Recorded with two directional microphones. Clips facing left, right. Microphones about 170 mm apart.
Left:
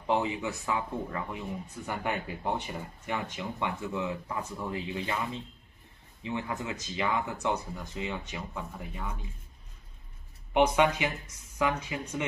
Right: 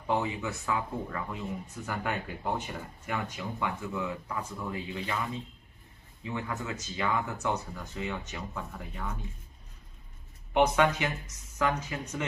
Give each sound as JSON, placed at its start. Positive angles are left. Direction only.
{"t": 0.0, "sound": "speech", "side_deg": 20}
{"t": 6.2, "sound": "speech", "side_deg": 20}
{"t": 10.5, "sound": "speech", "side_deg": 15}